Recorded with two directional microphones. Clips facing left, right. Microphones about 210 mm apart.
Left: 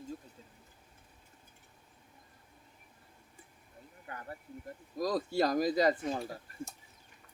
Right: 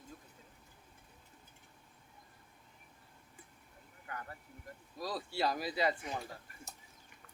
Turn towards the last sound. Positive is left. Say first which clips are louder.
# left 6 dB
turn(degrees=40)  # may be behind; listen again after turning